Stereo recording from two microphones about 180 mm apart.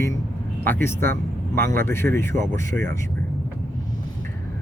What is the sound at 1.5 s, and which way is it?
Speech, 55° right (ahead or behind).